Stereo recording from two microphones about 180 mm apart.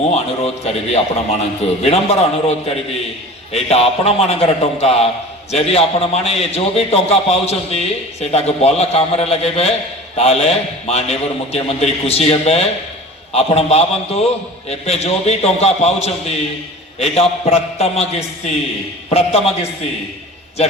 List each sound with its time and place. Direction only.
0.0 s a man's voice: 35° left (ahead or behind)
3.5 s a man's voice: 35° left (ahead or behind)